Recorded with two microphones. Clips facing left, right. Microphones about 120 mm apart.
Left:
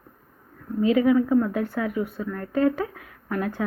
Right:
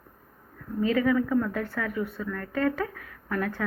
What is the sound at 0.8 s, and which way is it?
Speech, 15° left (ahead or behind).